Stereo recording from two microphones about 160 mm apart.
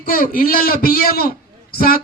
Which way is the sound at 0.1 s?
65° left (ahead or behind).